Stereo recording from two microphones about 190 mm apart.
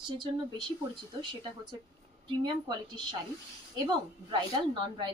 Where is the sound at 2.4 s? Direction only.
25° right (ahead or behind).